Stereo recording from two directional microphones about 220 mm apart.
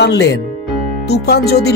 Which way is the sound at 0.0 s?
50° left (ahead or behind).